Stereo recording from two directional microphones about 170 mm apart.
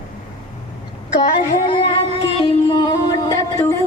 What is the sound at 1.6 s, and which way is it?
Speech, 30° left (ahead or behind).